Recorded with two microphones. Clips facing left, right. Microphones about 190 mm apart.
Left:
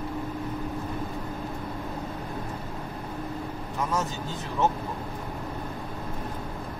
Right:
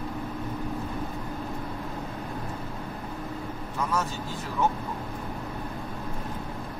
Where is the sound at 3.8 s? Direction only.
20° left (ahead or behind).